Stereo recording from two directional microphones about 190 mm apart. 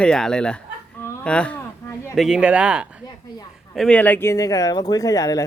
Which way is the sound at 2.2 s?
5° right (ahead or behind).